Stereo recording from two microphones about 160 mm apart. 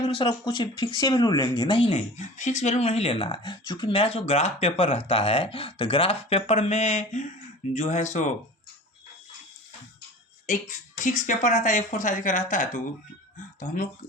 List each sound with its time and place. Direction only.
0.2 s speech: 30° left (ahead or behind); by 8.3 s 50° left (ahead or behind)
11.0 s speech: 50° left (ahead or behind)